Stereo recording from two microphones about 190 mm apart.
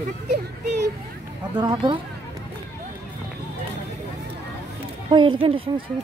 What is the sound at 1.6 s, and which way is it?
Speech, 25° right (ahead or behind).